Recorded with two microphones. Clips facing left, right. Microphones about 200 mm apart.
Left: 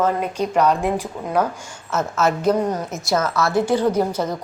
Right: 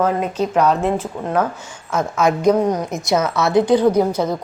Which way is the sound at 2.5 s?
10° right (ahead or behind).